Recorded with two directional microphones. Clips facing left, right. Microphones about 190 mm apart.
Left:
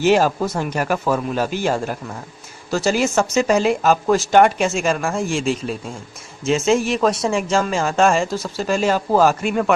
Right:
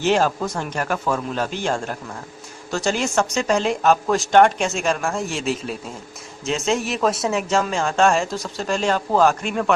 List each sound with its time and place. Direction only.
0.0 s speech: 10° left (ahead or behind)